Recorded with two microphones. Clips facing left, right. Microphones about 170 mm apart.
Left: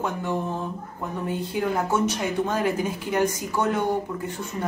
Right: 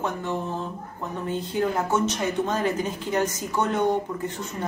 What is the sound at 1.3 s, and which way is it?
Speech, 10° left (ahead or behind).